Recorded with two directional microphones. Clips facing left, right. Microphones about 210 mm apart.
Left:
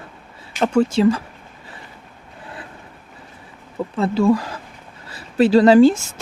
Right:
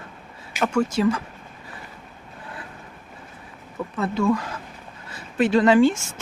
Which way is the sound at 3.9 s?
30° left (ahead or behind).